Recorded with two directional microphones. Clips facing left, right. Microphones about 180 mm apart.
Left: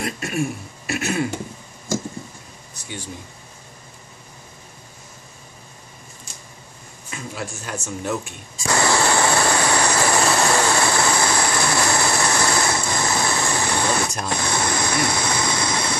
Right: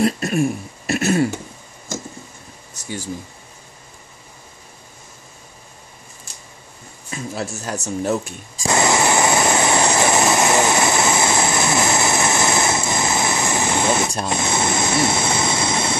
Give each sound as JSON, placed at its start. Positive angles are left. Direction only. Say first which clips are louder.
{"t": 0.0, "sound": "speech", "louder": "right 6 dB", "side_deg": -40}
{"t": 7.1, "sound": "speech", "louder": "right 4 dB", "side_deg": -40}
{"t": 8.6, "sound": "vehicle", "louder": "right 2 dB", "side_deg": -20}